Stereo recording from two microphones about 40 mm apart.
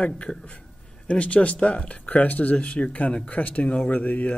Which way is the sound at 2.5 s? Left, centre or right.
Left.